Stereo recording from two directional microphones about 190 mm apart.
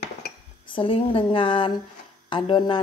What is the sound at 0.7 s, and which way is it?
A woman's voice, 25° left (ahead or behind).